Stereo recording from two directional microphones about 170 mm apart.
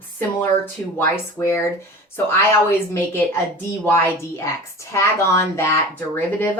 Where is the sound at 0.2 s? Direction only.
10° left (ahead or behind).